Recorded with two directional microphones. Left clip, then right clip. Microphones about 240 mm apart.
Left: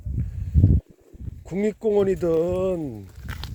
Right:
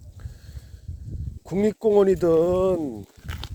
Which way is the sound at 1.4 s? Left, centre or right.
Right.